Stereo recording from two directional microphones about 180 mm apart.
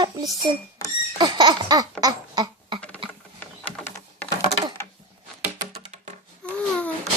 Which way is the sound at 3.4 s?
10° left (ahead or behind).